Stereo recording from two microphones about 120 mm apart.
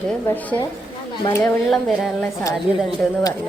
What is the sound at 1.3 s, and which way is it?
Speech, 25° left (ahead or behind).